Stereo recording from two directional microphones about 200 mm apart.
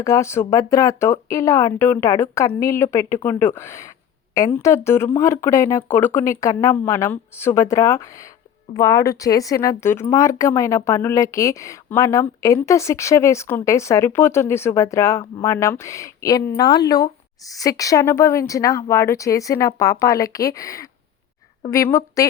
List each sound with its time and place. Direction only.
0.0 s speech: 15° left (ahead or behind)